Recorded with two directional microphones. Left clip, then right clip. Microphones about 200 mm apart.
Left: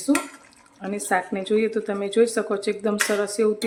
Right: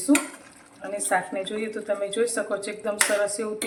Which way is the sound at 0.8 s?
50° left (ahead or behind).